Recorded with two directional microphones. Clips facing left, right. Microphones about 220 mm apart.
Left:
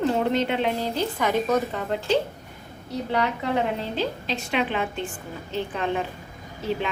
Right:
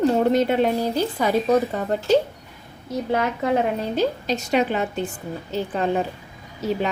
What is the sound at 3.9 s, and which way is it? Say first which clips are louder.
A woman's voice: right 5 dB; 45° right (ahead or behind).